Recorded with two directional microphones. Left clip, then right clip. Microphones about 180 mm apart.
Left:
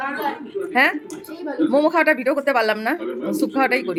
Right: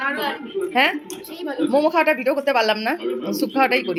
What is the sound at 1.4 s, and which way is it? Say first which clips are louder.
A woman's voice: left 1 dB; 5° left (ahead or behind).